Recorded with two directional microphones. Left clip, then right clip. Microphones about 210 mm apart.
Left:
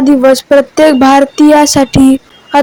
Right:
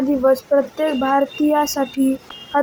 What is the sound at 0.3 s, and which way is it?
A woman's voice, 40° left (ahead or behind).